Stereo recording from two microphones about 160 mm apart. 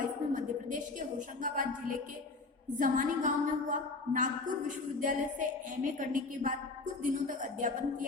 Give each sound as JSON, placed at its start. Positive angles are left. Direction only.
{"t": 0.0, "sound": "music", "side_deg": -55}
{"t": 2.7, "sound": "a woman's voice", "side_deg": -55}